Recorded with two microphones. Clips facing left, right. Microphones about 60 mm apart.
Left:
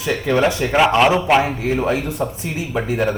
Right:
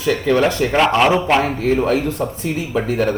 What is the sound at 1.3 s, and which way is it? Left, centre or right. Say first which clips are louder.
Speech: right 1 dB; centre.